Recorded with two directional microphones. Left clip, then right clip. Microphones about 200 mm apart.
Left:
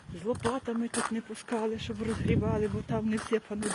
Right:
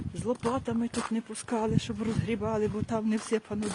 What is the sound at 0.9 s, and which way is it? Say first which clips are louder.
Speech: left 1 dB; 55° left (ahead or behind).